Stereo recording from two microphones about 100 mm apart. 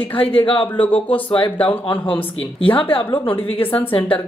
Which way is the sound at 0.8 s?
15° left (ahead or behind).